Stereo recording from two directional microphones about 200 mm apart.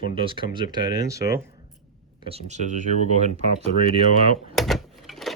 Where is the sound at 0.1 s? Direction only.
25° right (ahead or behind).